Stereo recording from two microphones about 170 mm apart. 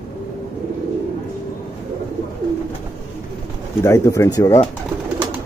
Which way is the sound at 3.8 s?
15° left (ahead or behind).